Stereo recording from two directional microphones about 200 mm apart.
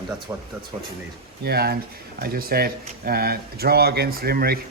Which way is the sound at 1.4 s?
50° right (ahead or behind).